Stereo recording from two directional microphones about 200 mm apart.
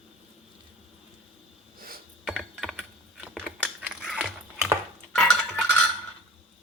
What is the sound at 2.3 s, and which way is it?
Typing, centre (ahead or behind).